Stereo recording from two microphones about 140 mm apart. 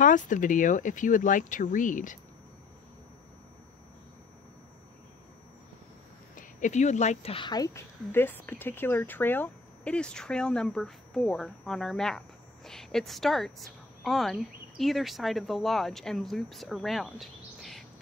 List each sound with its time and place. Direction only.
0.0 s speech: 65° left (ahead or behind)
6.3 s speech: 60° left (ahead or behind)
7.3 s speech: 30° left (ahead or behind); by 17.8 s centre (ahead or behind)